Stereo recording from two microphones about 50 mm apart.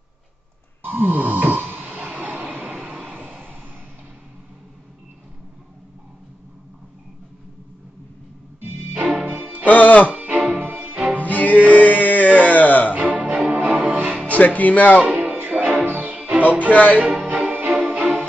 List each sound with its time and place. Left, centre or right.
0.8 s a sound: right
2.0 s vehicle: right
8.5 s music: right
9.7 s speech: left
10.1 s music: right
11.2 s cello: left
11.7 s music: left
12.4 s a sound: left
12.9 s music: right
14.2 s music: left
15.0 s music: right
16.7 s speech: left
17.2 s music: right